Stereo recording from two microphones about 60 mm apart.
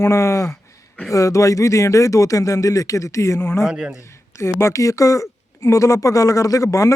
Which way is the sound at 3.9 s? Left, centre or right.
Left.